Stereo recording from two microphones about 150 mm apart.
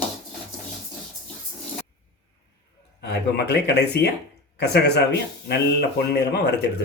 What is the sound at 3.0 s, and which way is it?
Speech, 90° left.